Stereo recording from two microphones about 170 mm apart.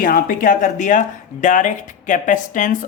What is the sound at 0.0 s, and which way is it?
Speech, 55° left (ahead or behind).